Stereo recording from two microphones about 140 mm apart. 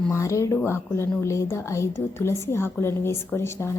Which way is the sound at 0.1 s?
20° left (ahead or behind).